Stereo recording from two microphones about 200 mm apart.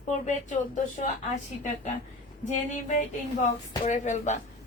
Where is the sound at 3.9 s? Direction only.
35° left (ahead or behind).